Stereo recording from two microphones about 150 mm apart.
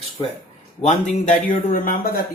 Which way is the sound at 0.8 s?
50° left (ahead or behind).